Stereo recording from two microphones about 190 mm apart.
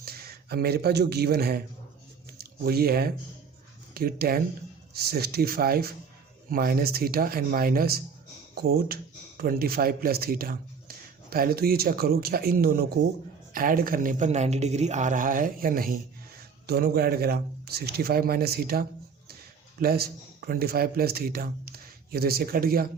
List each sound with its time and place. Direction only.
0.0 s speech: 55° right (ahead or behind)